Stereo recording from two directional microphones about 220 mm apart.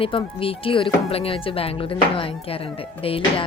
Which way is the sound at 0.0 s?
25° left (ahead or behind).